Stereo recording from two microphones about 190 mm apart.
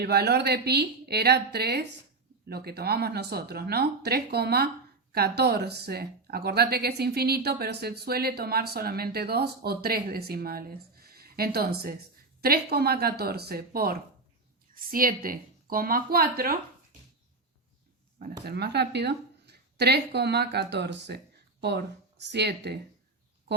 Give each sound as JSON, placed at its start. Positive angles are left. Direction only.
{"t": 0.0, "sound": "speech", "side_deg": -55}
{"t": 18.2, "sound": "speech", "side_deg": -55}